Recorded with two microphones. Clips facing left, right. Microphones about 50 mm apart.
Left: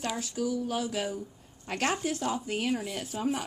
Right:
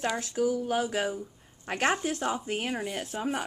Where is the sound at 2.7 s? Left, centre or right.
Centre.